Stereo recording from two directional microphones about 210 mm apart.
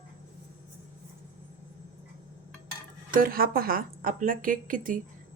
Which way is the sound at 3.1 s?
45° right (ahead or behind).